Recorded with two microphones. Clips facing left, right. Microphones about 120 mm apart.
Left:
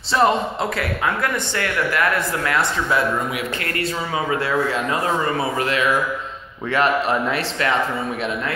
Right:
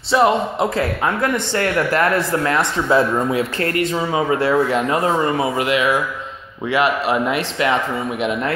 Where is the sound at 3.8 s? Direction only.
20° right (ahead or behind).